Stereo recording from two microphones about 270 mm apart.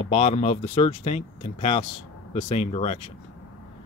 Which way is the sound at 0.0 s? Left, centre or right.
Left.